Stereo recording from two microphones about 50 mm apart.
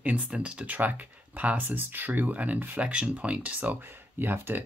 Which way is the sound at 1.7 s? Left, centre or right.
Right.